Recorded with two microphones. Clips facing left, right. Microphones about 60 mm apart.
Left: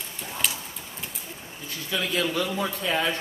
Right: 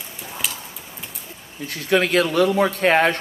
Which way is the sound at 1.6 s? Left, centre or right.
Right.